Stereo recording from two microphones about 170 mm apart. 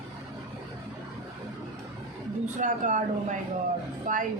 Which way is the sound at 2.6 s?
50° right (ahead or behind).